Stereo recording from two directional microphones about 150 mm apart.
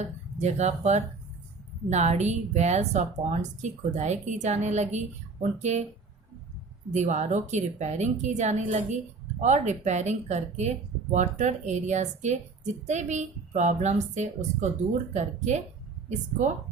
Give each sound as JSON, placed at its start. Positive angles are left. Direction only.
{"t": 0.0, "sound": "a woman's voice", "side_deg": -50}
{"t": 6.9, "sound": "a woman's voice", "side_deg": -50}